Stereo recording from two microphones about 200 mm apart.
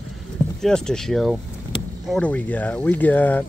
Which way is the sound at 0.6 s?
5° left (ahead or behind).